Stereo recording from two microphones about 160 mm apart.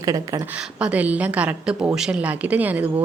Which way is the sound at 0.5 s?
10° right (ahead or behind).